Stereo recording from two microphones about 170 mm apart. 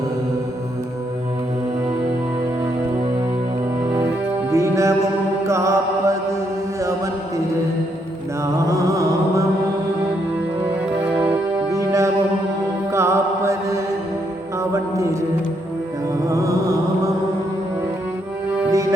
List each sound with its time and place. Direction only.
4.5 s music: 20° right (ahead or behind)
5.5 s mantra: 15° right (ahead or behind)
8.6 s a sound: 20° right (ahead or behind)
11.0 s music: 10° right (ahead or behind)
12.9 s mantra: 15° right (ahead or behind)
14.6 s music: 20° right (ahead or behind)
16.3 s music: 20° right (ahead or behind)
18.7 s music: 20° right (ahead or behind)